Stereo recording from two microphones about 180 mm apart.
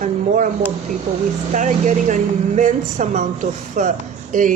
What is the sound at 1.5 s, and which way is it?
Speech, 45° right (ahead or behind).